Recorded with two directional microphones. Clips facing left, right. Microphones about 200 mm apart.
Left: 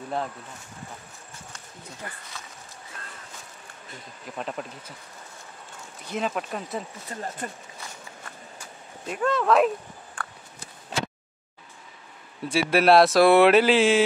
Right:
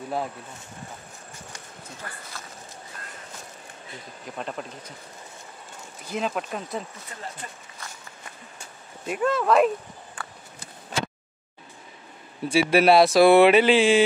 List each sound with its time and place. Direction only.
2.3 s speech: centre (ahead or behind)
4.4 s speech: centre (ahead or behind)
6.0 s speech: centre (ahead or behind)
7.1 s speech: 40° left (ahead or behind)
9.0 s speech: 5° right (ahead or behind)
10.2 s a sound: 5° right (ahead or behind)
12.4 s speech: centre (ahead or behind)